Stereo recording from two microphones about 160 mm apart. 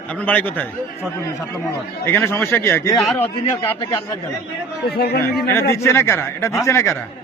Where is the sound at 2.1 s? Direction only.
15° left (ahead or behind).